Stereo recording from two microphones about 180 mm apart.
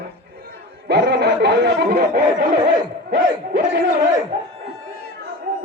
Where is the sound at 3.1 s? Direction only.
65° right (ahead or behind).